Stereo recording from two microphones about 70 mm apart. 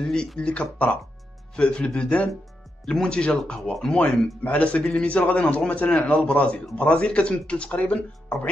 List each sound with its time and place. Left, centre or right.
0.0 s speech: centre
4.0 s speech: left